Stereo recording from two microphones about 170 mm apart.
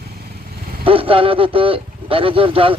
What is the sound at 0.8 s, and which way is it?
A man's voice, 35° right (ahead or behind).